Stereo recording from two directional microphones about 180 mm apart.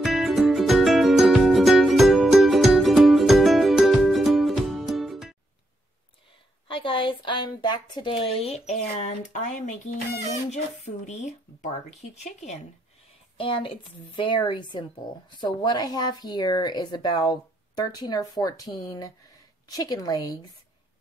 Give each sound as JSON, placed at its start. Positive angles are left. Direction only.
{"t": 0.0, "sound": "music", "side_deg": 0}
{"t": 6.7, "sound": "a woman's voice", "side_deg": 30}
{"t": 11.1, "sound": "speech", "side_deg": 40}
{"t": 13.4, "sound": "speech", "side_deg": 30}